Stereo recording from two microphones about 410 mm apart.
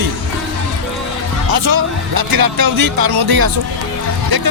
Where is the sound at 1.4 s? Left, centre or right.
Right.